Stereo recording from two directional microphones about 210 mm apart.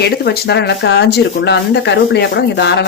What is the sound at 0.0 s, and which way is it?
Speech, 50° left (ahead or behind).